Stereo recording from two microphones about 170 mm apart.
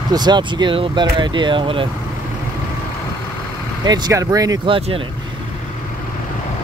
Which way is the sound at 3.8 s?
25° right (ahead or behind).